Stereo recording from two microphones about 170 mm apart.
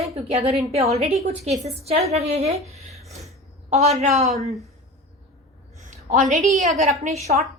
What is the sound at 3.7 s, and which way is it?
Speech, 40° right (ahead or behind).